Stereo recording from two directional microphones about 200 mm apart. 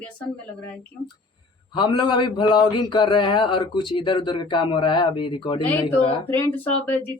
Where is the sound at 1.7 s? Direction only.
25° left (ahead or behind).